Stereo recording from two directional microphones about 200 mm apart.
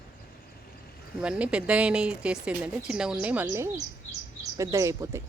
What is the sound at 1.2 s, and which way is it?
Speech, 5° right (ahead or behind).